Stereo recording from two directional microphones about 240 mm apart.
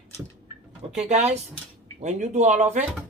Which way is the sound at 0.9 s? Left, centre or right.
Right.